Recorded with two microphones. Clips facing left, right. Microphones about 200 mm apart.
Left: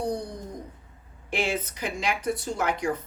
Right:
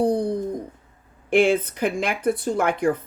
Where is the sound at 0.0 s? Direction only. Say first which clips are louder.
Right 9 dB; 55° right (ahead or behind).